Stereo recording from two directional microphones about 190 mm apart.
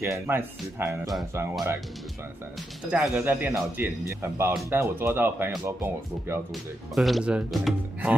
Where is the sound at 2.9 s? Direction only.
5° right (ahead or behind).